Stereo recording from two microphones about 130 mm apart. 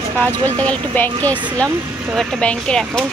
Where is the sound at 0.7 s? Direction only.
10° left (ahead or behind).